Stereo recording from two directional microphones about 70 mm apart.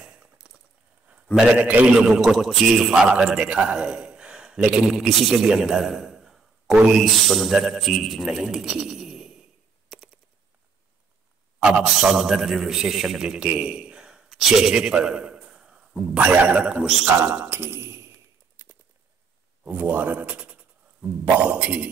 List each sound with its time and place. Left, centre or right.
0.0 s a sound: centre
1.1 s a man's voice: centre
2.0 s a man's voice: centre
8.3 s speech: centre
11.6 s a man's voice: centre
16.8 s a man's voice: centre
17.2 s speech: right
18.6 s a sound: right
19.7 s speech: right